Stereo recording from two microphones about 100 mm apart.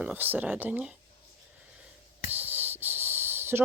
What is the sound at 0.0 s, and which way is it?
Speech, 20° right (ahead or behind).